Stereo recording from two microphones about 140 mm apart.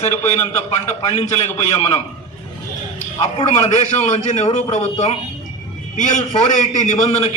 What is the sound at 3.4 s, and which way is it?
A man's voice, 55° left (ahead or behind).